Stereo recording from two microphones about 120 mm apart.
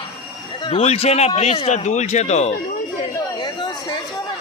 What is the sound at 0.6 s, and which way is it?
A man's voice, 50° left (ahead or behind).